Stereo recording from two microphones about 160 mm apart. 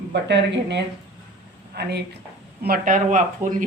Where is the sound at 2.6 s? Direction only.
65° right (ahead or behind).